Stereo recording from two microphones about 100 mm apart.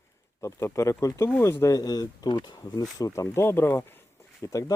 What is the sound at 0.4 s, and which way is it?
Speech, 30° left (ahead or behind).